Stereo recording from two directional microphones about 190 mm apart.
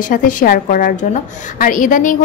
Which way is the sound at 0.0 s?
45° left (ahead or behind).